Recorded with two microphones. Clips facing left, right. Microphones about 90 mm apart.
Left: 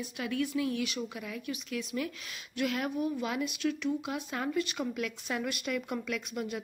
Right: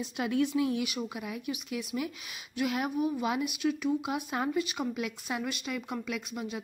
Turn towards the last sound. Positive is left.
turn(degrees=0)  # may be behind; listen again after turning